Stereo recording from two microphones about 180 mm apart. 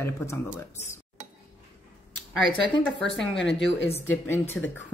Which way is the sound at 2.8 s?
90° left.